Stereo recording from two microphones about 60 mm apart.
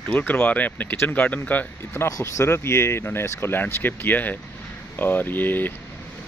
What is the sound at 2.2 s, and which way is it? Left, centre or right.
Speech, left.